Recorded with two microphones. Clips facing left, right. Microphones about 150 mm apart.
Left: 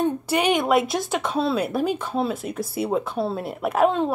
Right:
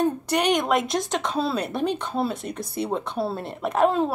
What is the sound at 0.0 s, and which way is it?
A woman's voice, 5° left (ahead or behind).